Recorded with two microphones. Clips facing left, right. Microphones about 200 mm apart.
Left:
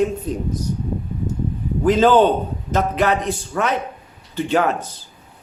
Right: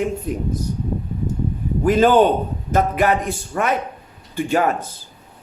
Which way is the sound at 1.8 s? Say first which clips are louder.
Even; 10° right (ahead or behind).